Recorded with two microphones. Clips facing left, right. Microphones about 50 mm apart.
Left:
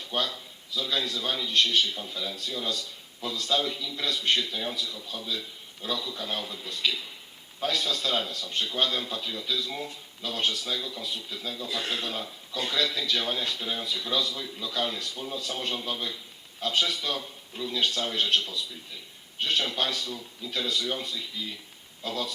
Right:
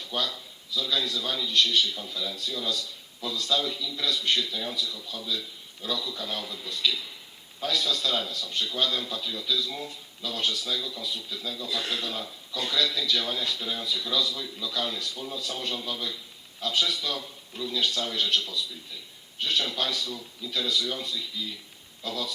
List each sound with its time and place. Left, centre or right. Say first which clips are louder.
0.0 s a man's voice: left 1 dB; left